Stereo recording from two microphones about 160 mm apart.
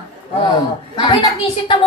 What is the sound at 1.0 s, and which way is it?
Speech, 30° left (ahead or behind).